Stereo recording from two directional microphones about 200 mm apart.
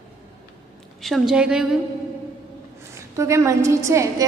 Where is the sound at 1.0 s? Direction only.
Centre (ahead or behind).